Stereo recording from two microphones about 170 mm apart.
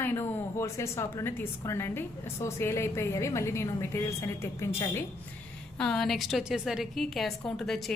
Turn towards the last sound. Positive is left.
turn(degrees=0)  # may be behind; listen again after turning